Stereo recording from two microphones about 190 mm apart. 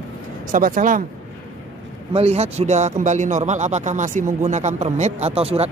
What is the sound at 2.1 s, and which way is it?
A man's voice, 35° right (ahead or behind).